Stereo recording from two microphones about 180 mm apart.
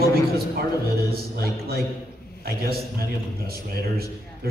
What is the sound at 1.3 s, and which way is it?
A man's voice, 60° right (ahead or behind).